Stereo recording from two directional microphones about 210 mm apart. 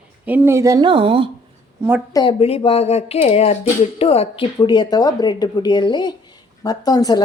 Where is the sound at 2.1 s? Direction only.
25° left (ahead or behind).